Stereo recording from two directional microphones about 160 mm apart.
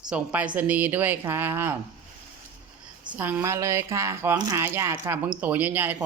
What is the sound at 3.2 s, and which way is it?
Speech, 10° right (ahead or behind).